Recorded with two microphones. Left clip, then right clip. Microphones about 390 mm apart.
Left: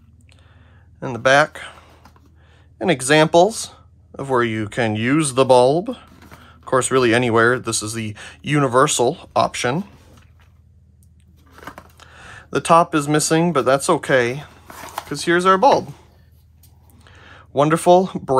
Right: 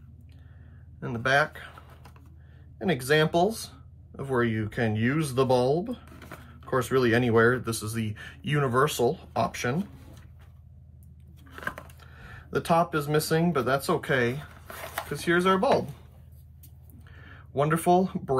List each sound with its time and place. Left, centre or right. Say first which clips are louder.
0.9 s speech: left 10 dB; centre
2.8 s speech: left 9 dB; centre
12.0 s speech: left 9 dB; centre
17.0 s speech: left 7 dB; centre